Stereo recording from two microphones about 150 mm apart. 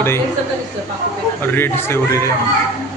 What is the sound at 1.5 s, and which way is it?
Speech, 15° left (ahead or behind).